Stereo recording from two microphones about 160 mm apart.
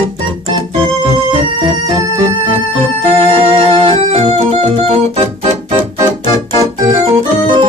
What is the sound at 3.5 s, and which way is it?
Music, 35° right (ahead or behind).